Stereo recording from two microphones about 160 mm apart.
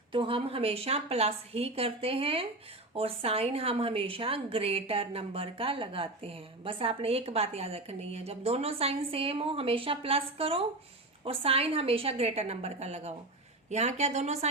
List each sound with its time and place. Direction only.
0.1 s a woman's voice: 35° right (ahead or behind)